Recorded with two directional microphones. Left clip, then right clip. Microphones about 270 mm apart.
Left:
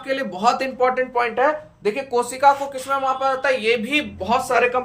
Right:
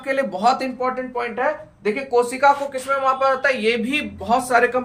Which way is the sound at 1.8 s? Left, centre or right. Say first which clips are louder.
Right 2 dB; left.